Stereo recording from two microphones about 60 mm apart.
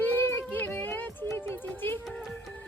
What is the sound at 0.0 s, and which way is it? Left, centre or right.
Child singing, left.